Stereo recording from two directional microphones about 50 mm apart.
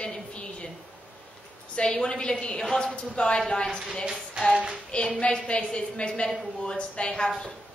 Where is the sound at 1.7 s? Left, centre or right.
Centre.